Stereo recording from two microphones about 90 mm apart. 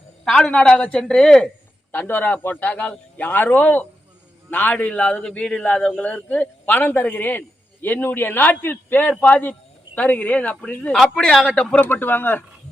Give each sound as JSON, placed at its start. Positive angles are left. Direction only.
{"t": 0.3, "sound": "a man's voice", "side_deg": 10}
{"t": 1.9, "sound": "a man's voice", "side_deg": 20}